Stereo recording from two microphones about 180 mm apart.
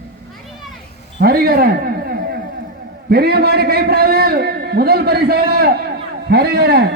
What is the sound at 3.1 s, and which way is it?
A man's voice, 60° right (ahead or behind).